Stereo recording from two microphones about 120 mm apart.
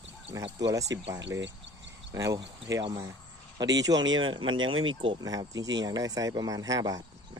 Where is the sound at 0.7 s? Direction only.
25° right (ahead or behind).